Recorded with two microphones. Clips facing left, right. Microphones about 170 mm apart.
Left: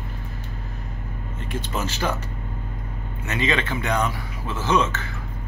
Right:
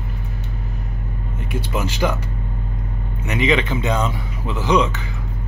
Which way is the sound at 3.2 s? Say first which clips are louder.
Right 5 dB; 15° right (ahead or behind).